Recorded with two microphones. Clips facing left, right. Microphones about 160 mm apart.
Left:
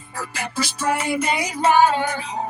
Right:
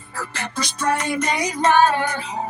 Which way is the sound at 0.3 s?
5° left (ahead or behind).